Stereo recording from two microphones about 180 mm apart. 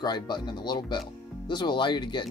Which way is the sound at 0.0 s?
25° left (ahead or behind).